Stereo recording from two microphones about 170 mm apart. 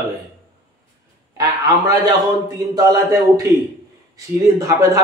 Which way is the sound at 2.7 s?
20° right (ahead or behind).